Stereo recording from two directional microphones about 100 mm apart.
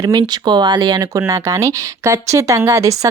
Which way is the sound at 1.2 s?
30° right (ahead or behind).